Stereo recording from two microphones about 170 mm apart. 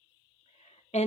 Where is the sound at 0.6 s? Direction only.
40° left (ahead or behind).